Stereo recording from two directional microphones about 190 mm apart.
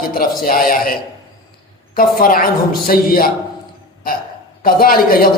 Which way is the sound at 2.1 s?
50° left (ahead or behind).